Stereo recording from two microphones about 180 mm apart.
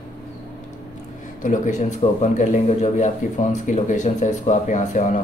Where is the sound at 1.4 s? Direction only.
45° left (ahead or behind).